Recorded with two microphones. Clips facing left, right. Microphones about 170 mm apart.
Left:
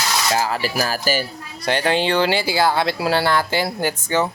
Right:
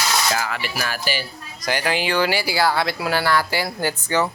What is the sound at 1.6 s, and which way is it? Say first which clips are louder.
Speech: left 4 dB; 25° left (ahead or behind).